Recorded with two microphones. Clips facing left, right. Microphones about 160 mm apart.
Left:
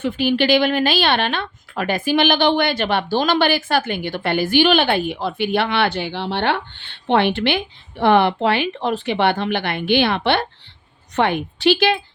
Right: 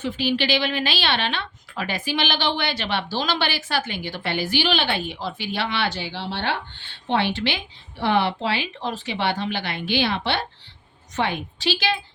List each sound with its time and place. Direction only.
0.0 s a woman's voice: 50° left (ahead or behind)